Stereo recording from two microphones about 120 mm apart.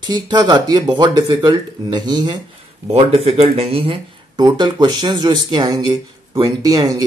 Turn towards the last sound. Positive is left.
turn(degrees=-35)  # may be behind; listen again after turning